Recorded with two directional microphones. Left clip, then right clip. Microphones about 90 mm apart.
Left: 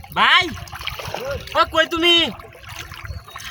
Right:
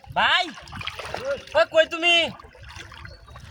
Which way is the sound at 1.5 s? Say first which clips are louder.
Left 2 dB; 50° right (ahead or behind).